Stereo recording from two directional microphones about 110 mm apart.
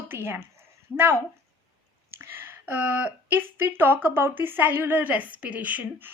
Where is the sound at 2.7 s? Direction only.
20° right (ahead or behind).